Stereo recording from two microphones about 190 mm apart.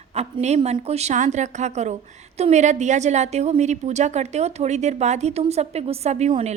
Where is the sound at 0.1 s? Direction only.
35° right (ahead or behind).